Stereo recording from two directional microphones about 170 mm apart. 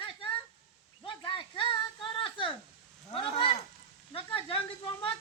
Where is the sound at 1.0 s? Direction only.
30° left (ahead or behind).